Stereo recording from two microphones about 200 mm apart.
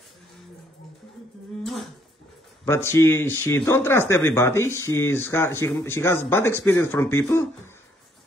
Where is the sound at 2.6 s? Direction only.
15° left (ahead or behind).